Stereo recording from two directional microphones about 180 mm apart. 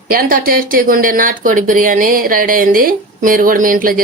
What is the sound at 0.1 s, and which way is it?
Speech, 55° right (ahead or behind).